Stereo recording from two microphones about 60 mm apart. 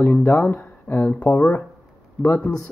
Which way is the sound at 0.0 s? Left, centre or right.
Left.